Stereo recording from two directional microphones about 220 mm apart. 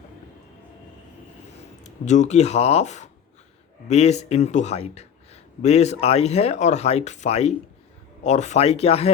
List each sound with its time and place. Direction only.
1.8 s speech: 30° left (ahead or behind)